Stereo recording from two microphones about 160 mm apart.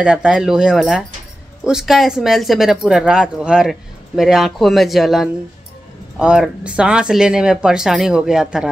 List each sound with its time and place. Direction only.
0.0 s speech: 5° right (ahead or behind)